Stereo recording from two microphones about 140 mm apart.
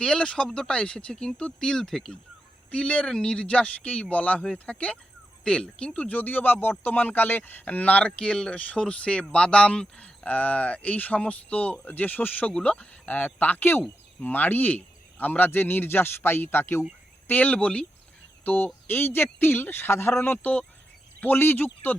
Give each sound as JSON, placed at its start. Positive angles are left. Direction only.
{"t": 0.0, "sound": "speech", "side_deg": 5}